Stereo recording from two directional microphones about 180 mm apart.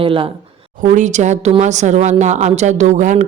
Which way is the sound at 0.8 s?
45° right (ahead or behind).